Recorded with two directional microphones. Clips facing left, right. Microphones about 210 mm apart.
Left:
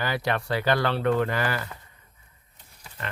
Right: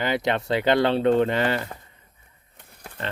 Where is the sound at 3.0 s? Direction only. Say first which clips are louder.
Right 4 dB; 30° right (ahead or behind).